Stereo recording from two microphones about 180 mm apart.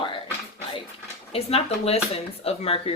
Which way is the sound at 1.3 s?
35° left (ahead or behind).